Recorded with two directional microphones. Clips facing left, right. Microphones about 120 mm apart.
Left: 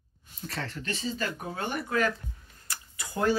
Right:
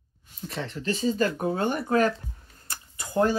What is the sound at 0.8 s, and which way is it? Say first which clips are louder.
Speech: right 10 dB; 40° right (ahead or behind).